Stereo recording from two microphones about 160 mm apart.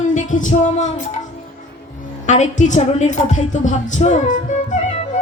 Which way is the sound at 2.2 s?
50° left (ahead or behind).